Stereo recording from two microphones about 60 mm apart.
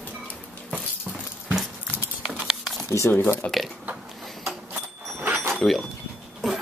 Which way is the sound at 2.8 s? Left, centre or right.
Left.